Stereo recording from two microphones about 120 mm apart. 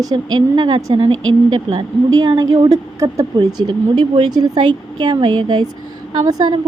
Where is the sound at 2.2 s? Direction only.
30° right (ahead or behind).